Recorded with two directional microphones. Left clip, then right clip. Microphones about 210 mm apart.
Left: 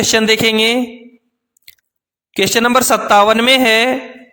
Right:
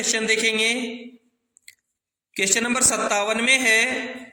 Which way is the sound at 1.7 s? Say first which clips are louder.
Left 5 dB; 45° left (ahead or behind).